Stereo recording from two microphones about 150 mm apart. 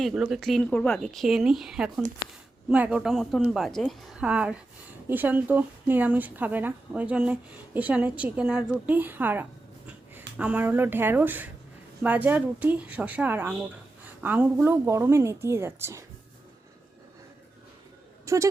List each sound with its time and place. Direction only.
0.0 s speech: 5° right (ahead or behind)
18.3 s speech: 20° right (ahead or behind)